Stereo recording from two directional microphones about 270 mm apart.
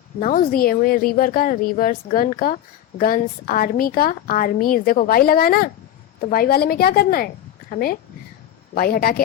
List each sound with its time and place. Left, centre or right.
0.2 s a woman's voice: left